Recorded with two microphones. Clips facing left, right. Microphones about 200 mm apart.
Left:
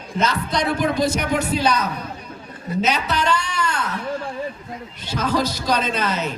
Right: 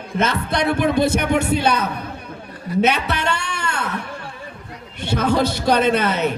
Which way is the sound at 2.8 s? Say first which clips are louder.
Right 1 dB; 60° right (ahead or behind).